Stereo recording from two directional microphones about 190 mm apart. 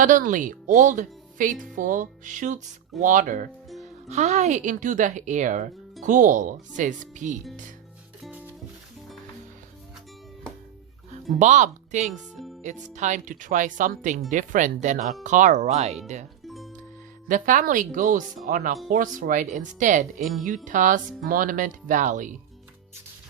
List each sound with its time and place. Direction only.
0.0 s speech: 45° right (ahead or behind)
8.2 s music: 10° right (ahead or behind)
11.3 s speech: 40° right (ahead or behind)
17.2 s speech: 45° right (ahead or behind)